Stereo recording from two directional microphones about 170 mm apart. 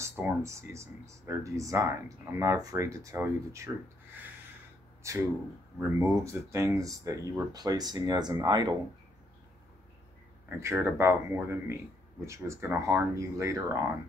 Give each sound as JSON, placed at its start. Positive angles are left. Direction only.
{"t": 0.2, "sound": "speech", "side_deg": -15}
{"t": 5.1, "sound": "speech", "side_deg": -15}
{"t": 10.6, "sound": "speech", "side_deg": -15}